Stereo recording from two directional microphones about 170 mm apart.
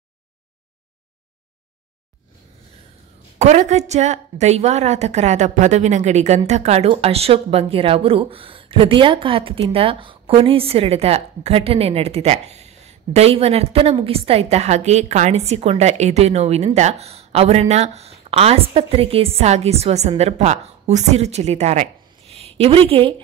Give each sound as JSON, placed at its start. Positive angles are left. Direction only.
{"t": 3.3, "sound": "a woman's voice", "side_deg": -40}